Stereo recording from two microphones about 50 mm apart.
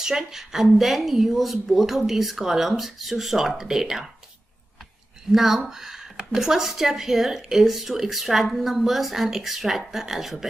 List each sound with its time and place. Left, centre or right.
0.0 s speech: centre
5.3 s speech: centre